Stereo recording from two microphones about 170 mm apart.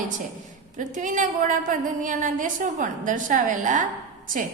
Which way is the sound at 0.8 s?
50° right (ahead or behind).